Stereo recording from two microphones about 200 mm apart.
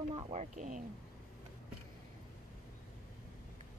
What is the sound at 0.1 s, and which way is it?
Speech, 30° right (ahead or behind).